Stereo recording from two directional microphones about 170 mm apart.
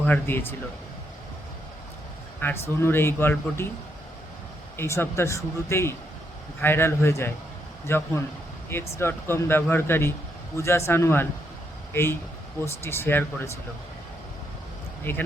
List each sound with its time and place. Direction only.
0.0 s speech: 10° left (ahead or behind)
2.4 s speech: 15° left (ahead or behind)
4.8 s speech: 15° left (ahead or behind)
12.6 s speech: 15° left (ahead or behind)
15.1 s speech: 15° left (ahead or behind)